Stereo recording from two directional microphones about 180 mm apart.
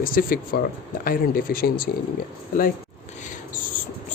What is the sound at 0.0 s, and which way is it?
Speech, 50° left (ahead or behind).